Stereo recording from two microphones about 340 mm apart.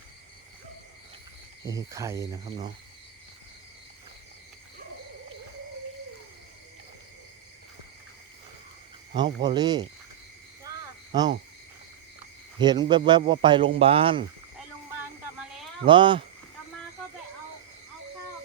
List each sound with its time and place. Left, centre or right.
1.6 s a man's voice: centre
9.1 s a man's voice: centre
11.1 s frog: centre
12.5 s a man's voice: centre
15.9 s a man's voice: centre